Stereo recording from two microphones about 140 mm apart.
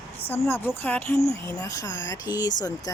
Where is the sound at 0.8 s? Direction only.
15° left (ahead or behind).